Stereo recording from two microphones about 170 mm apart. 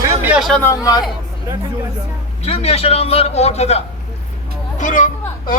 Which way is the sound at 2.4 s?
35° left (ahead or behind).